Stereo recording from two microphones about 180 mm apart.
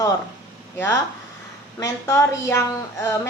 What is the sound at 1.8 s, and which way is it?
A woman's voice, 15° left (ahead or behind).